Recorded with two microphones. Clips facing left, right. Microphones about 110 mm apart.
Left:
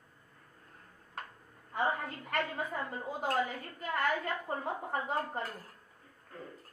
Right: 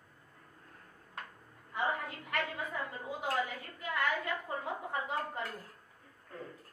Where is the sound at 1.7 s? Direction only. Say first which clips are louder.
Left 2 dB; 40° left (ahead or behind).